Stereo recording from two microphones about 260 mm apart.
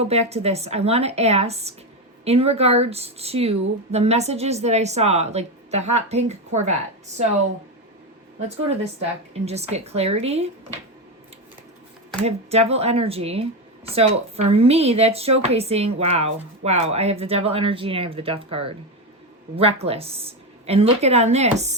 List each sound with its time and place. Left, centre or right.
0.0 s speech: right
8.4 s speech: right
12.2 s speech: right